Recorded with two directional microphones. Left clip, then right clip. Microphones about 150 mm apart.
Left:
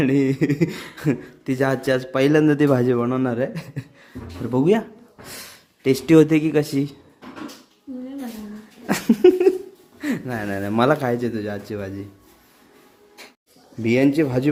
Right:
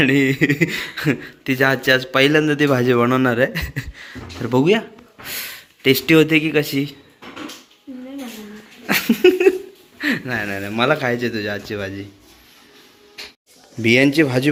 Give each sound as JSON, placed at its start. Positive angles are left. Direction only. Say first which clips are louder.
{"t": 0.0, "sound": "a man's voice", "louder": "right 4 dB", "side_deg": 10}
{"t": 2.9, "sound": "speech", "louder": "right 6 dB", "side_deg": 0}
{"t": 4.6, "sound": "a man's voice", "louder": "left 1 dB", "side_deg": 20}
{"t": 9.0, "sound": "a sound", "louder": "right 1 dB", "side_deg": 20}
{"t": 10.0, "sound": "a man's voice", "louder": "right 6 dB", "side_deg": 15}
{"t": 10.7, "sound": "a man's voice", "louder": "even", "side_deg": 30}
{"t": 13.8, "sound": "speech", "louder": "right 4 dB", "side_deg": 5}